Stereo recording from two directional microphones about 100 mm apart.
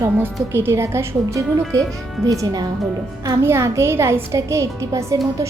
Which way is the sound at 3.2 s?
25° right (ahead or behind).